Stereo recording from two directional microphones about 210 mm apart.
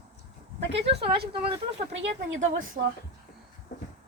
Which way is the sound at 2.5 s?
40° right (ahead or behind).